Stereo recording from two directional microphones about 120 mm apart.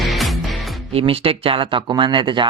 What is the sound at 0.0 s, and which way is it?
Music, centre (ahead or behind).